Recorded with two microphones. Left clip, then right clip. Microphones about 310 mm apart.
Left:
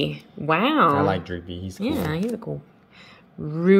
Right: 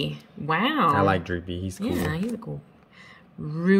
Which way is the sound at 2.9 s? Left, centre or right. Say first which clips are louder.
Left 2 dB; centre.